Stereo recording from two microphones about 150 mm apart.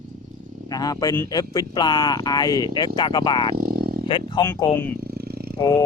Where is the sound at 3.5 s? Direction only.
85° right.